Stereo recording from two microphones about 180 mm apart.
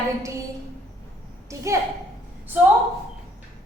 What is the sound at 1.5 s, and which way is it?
Speech, 15° right (ahead or behind).